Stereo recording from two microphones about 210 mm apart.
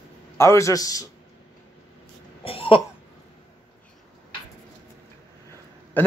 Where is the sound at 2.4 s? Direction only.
25° left (ahead or behind).